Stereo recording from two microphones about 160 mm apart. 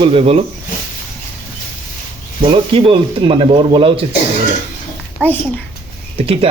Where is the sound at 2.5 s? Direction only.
35° right (ahead or behind).